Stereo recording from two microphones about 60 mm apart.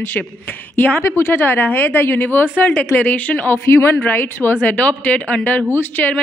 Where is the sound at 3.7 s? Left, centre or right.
Left.